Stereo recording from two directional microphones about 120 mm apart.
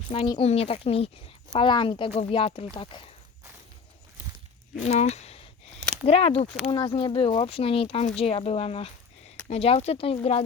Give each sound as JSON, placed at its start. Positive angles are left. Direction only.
{"t": 0.1, "sound": "speech", "side_deg": 50}
{"t": 1.5, "sound": "speech", "side_deg": 40}
{"t": 4.8, "sound": "speech", "side_deg": 70}
{"t": 6.7, "sound": "speech", "side_deg": 45}